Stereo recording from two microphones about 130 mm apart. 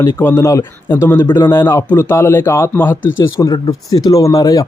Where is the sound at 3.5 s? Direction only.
30° left (ahead or behind).